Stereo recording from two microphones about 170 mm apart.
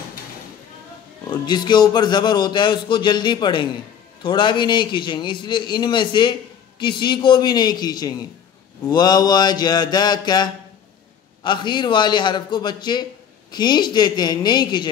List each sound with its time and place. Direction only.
1.3 s a man's voice: 25° left (ahead or behind)